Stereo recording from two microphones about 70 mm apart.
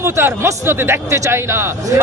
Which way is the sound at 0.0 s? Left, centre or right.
Right.